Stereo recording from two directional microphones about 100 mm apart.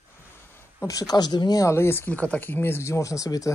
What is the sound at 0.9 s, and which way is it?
Speech, 40° left (ahead or behind).